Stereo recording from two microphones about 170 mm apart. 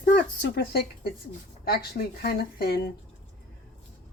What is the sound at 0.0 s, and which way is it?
A woman's voice, 80° left.